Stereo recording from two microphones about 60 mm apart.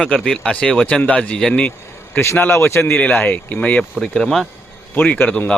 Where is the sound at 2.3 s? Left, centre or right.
Left.